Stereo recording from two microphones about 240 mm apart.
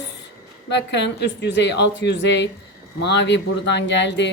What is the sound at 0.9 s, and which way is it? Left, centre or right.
Speech, left.